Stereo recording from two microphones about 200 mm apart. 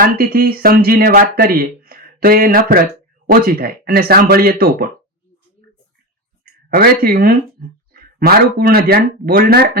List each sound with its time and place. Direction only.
0.0 s speech: 45° right (ahead or behind)
1.8 s a sound: 45° right (ahead or behind)
3.2 s speech: 45° right (ahead or behind)
6.4 s speech: 50° right (ahead or behind)